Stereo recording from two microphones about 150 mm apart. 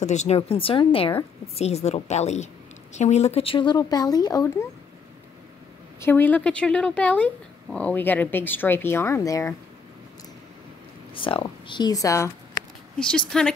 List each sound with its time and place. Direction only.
0.0 s a woman's voice: 50° left (ahead or behind); by 4.6 s 25° left (ahead or behind)
5.9 s speech: 15° left (ahead or behind)
11.1 s speech: 35° left (ahead or behind)
13.0 s speech: 5° left (ahead or behind)